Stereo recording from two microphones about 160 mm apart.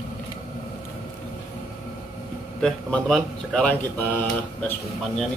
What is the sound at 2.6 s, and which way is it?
Speech, 5° left (ahead or behind).